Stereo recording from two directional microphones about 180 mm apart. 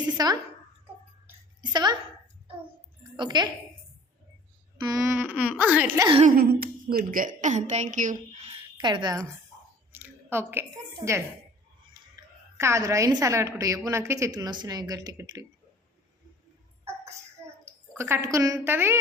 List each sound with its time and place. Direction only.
0.2 s a woman's voice: 20° right (ahead or behind)
1.7 s a woman's voice: 25° right (ahead or behind)
3.2 s a woman's voice: 25° right (ahead or behind)
4.8 s speech: 20° right (ahead or behind)
6.0 s a woman's voice: 25° right (ahead or behind)
6.2 s a woman's voice: 55° right (ahead or behind)
8.8 s a woman's voice: 25° right (ahead or behind)
17.9 s speech: 15° right (ahead or behind)